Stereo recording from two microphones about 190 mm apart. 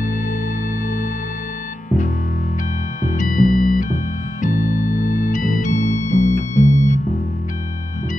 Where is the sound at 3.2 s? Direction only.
45° left (ahead or behind).